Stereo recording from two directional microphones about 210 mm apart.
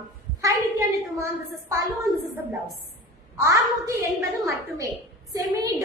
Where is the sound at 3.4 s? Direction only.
15° right (ahead or behind).